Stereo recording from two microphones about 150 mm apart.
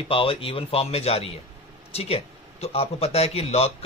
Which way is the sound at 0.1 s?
35° left (ahead or behind).